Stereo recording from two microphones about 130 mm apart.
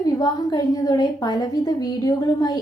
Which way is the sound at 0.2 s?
30° left (ahead or behind).